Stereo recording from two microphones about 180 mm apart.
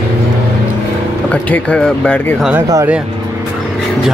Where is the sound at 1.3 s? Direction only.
10° left (ahead or behind).